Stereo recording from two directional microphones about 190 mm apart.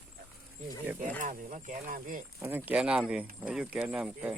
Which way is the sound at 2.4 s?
10° right (ahead or behind).